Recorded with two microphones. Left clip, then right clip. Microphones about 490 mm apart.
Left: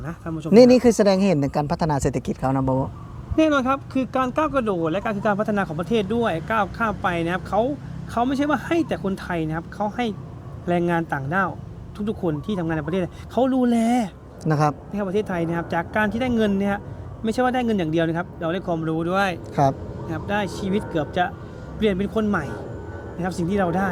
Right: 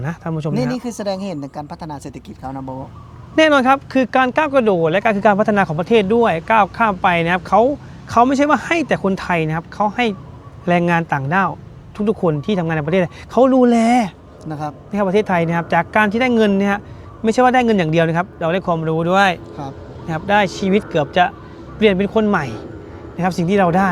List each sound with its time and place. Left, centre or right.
0.0 s speech: right
0.5 s speech: left
3.3 s speech: right
14.4 s speech: left
14.9 s speech: right
19.6 s speech: left
20.1 s speech: right